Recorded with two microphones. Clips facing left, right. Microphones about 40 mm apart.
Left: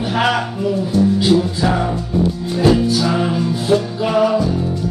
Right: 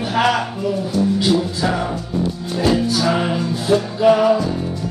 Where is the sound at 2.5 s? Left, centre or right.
Centre.